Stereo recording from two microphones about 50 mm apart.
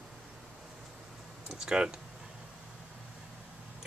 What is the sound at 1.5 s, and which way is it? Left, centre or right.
Speech, centre.